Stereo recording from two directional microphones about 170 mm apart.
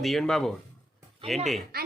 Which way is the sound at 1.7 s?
65° right (ahead or behind).